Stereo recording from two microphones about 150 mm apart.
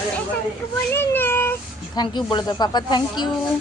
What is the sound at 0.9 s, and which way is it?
Speech, 15° left (ahead or behind).